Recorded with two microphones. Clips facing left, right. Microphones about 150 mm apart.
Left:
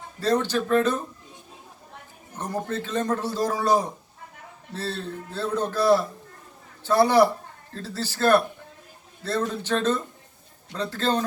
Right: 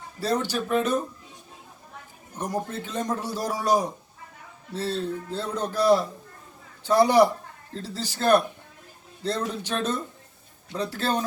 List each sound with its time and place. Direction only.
0.2 s a man's voice: 10° right (ahead or behind)
2.4 s a man's voice: 15° right (ahead or behind)